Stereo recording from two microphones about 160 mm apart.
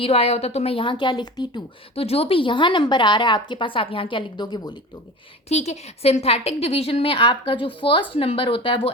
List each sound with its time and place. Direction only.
0.0 s a woman's voice: 40° left (ahead or behind)
5.5 s a woman's voice: 45° left (ahead or behind)